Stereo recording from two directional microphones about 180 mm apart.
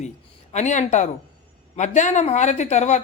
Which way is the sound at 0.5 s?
40° left (ahead or behind).